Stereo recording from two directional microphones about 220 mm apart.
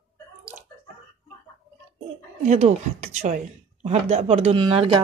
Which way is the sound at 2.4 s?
30° right (ahead or behind).